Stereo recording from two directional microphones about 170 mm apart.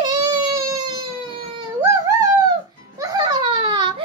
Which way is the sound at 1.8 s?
20° right (ahead or behind).